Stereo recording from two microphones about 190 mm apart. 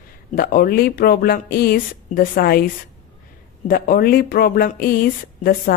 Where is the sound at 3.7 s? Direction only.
50° left (ahead or behind).